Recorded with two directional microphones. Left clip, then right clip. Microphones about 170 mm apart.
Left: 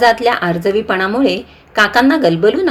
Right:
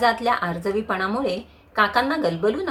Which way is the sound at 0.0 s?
35° left (ahead or behind).